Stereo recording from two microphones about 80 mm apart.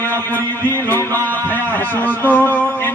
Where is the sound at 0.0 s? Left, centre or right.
Left.